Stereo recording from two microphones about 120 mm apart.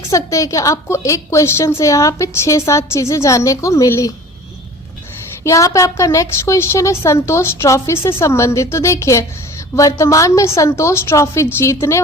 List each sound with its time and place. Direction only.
0.1 s a woman's voice: 25° left (ahead or behind)
5.4 s a woman's voice: 25° left (ahead or behind)